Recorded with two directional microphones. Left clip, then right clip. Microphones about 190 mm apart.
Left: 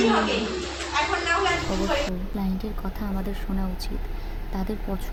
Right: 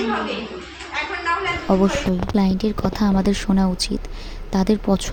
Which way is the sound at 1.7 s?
45° right (ahead or behind).